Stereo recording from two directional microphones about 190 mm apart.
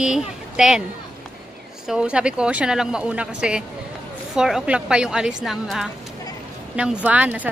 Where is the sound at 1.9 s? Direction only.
5° right (ahead or behind).